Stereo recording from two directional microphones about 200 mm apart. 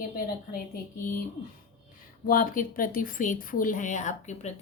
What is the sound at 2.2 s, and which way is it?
Speech, 45° left (ahead or behind).